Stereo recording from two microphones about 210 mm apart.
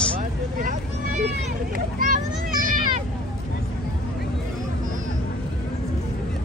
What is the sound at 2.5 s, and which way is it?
Cat, 40° right (ahead or behind).